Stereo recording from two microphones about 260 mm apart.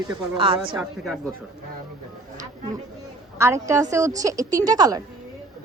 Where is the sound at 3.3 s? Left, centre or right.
Centre.